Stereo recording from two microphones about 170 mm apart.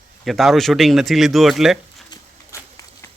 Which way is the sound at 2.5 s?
15° left (ahead or behind).